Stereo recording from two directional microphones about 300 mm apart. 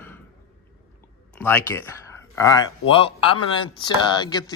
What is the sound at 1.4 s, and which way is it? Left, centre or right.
Speech, centre.